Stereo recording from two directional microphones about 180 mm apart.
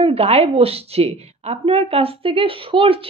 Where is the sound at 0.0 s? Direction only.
35° right (ahead or behind).